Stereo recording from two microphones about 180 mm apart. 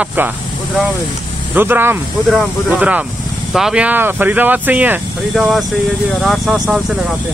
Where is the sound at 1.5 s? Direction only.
10° right (ahead or behind).